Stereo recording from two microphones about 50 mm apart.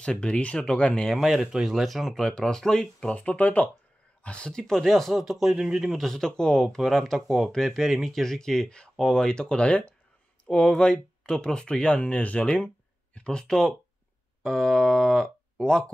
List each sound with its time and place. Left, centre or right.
0.0 s speech: left
1.1 s speech: centre
3.0 s speech: left
6.8 s speech: centre; by 13.2 s left
13.2 s speech: centre